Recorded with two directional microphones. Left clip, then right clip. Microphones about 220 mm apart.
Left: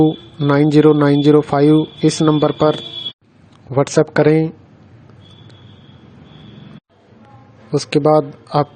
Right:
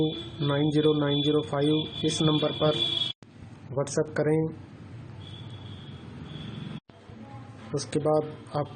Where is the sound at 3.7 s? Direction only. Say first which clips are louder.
Left 14 dB; 40° left (ahead or behind).